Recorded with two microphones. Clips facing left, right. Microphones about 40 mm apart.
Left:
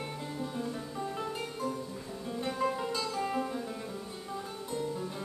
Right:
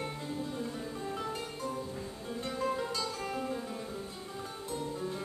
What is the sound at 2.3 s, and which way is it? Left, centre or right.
Music, centre.